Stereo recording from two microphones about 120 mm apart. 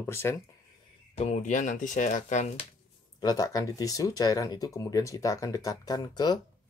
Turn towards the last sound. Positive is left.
turn(degrees=35)  # may be behind; listen again after turning